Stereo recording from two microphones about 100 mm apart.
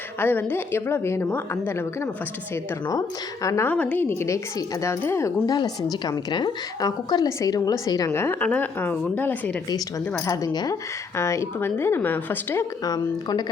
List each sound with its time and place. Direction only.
0.2 s a woman's voice: 20° left (ahead or behind)
3.4 s a woman's voice: 30° left (ahead or behind)
3.7 s a woman's voice: 15° left (ahead or behind)
4.0 s a woman's voice: 25° left (ahead or behind)
5.5 s a woman's voice: 40° left (ahead or behind)
8.1 s a woman's voice: 25° left (ahead or behind)
10.2 s a woman's voice: 40° left (ahead or behind)
11.2 s a woman's voice: 30° left (ahead or behind)
12.8 s a woman's voice: 40° left (ahead or behind)